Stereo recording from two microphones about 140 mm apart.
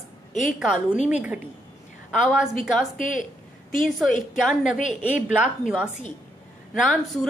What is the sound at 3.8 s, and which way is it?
Speech, centre (ahead or behind).